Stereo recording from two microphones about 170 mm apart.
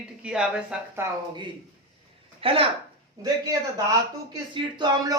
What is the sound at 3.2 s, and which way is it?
Speech, 20° right (ahead or behind).